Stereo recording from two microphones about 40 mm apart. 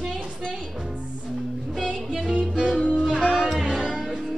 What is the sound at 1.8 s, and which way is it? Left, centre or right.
Music, centre.